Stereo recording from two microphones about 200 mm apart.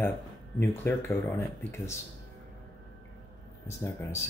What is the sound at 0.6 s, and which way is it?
Speech, 10° left (ahead or behind).